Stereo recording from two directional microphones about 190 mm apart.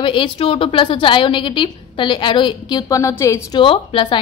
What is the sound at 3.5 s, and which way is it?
Speech, 25° left (ahead or behind).